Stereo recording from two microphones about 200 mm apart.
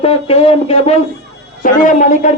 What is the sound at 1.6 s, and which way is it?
Speech, 40° left (ahead or behind).